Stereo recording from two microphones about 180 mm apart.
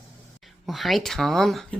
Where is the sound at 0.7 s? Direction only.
Centre (ahead or behind).